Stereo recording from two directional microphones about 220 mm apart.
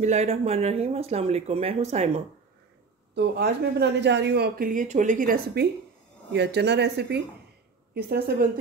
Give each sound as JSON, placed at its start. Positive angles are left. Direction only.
{"t": 0.0, "sound": "speech", "side_deg": -30}
{"t": 3.2, "sound": "speech", "side_deg": -50}